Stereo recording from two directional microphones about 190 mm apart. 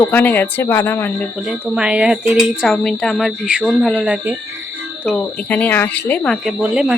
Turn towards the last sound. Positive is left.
turn(degrees=-5)  # may be behind; listen again after turning